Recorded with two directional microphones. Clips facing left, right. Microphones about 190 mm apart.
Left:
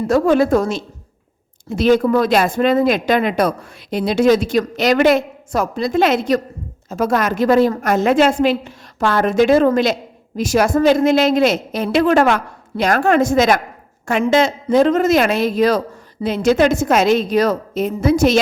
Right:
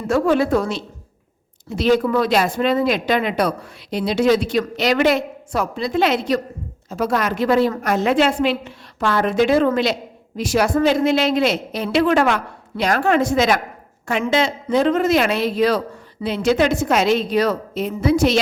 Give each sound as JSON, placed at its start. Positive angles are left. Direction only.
{"t": 0.1, "sound": "a woman's voice", "side_deg": 45}